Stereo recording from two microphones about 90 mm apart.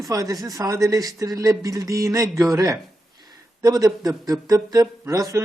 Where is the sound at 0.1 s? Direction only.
40° right (ahead or behind).